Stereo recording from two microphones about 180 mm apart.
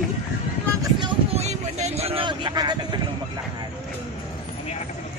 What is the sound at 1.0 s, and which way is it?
Speech, 35° right (ahead or behind).